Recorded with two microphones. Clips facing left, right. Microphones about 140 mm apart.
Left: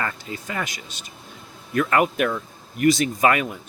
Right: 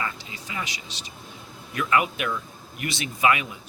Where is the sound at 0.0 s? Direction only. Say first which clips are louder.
Left 4 dB; 50° left (ahead or behind).